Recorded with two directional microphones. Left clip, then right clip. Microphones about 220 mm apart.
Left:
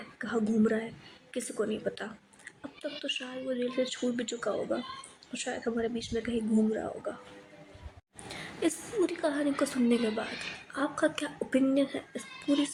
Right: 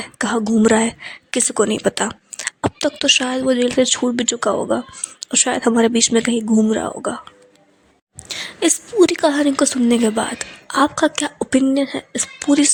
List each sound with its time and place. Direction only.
0.2 s speech: 40° right (ahead or behind)
8.3 s speech: 40° right (ahead or behind)